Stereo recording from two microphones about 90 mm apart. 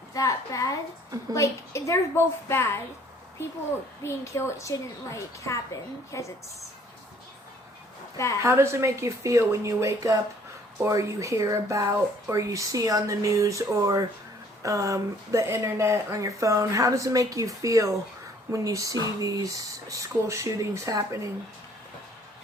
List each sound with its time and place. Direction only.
0.1 s a woman's voice: 35° left (ahead or behind)
4.0 s a woman's voice: 30° left (ahead or behind)
8.4 s speech: 30° right (ahead or behind)